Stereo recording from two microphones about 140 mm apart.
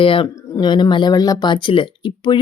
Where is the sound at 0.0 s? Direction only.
40° left (ahead or behind).